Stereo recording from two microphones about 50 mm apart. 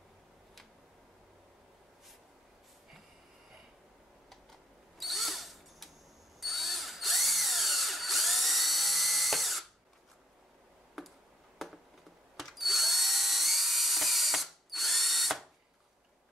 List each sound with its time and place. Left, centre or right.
4.3 s drill: centre
11.0 s tick: centre
11.5 s a sound: centre
12.4 s drill: centre